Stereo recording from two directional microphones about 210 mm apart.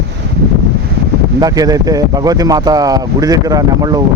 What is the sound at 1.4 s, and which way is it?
Speech, 15° right (ahead or behind).